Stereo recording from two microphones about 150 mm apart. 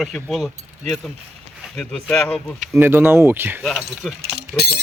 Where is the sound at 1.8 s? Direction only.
5° left (ahead or behind).